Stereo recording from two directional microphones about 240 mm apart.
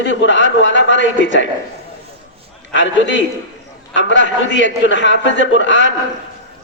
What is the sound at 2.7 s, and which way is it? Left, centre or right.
A man's voice, left.